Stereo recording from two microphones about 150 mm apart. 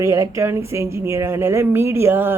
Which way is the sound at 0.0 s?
20° right (ahead or behind).